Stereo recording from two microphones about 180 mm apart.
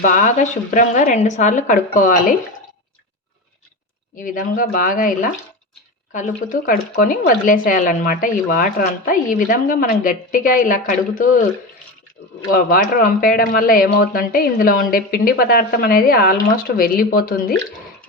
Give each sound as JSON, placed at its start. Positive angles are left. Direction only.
{"t": 0.0, "sound": "speech", "side_deg": 45}
{"t": 4.2, "sound": "speech", "side_deg": 50}
{"t": 12.5, "sound": "speech", "side_deg": 55}